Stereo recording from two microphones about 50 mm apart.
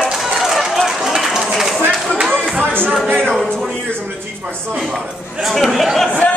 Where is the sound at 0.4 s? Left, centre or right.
Centre.